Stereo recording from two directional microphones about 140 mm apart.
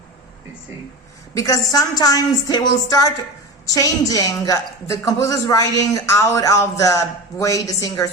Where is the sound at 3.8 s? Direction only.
25° left (ahead or behind).